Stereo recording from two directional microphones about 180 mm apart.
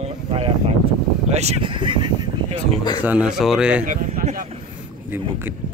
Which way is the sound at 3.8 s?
45° right (ahead or behind).